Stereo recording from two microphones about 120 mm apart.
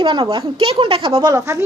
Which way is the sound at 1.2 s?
25° right (ahead or behind).